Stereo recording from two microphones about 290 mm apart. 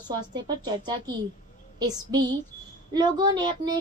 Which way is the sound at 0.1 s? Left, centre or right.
Centre.